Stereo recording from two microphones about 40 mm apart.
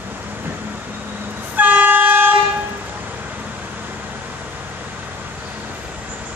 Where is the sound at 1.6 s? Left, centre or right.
Right.